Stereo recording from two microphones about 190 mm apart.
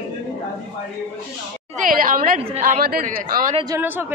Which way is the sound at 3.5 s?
20° right (ahead or behind).